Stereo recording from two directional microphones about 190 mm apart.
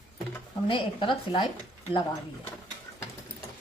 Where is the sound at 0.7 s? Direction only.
25° left (ahead or behind).